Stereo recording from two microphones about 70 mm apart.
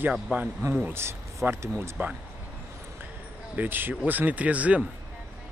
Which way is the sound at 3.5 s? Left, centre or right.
Right.